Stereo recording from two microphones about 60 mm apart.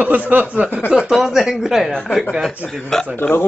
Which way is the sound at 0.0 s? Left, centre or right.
Right.